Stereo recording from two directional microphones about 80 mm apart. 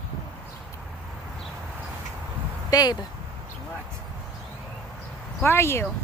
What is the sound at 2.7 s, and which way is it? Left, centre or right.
Speech, left.